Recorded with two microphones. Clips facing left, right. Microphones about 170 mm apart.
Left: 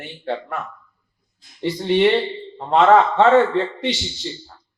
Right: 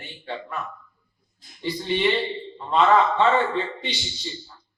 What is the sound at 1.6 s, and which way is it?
A man's voice, 70° left (ahead or behind).